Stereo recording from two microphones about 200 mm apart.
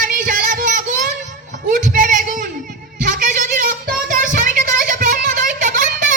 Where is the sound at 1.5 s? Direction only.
40° right (ahead or behind).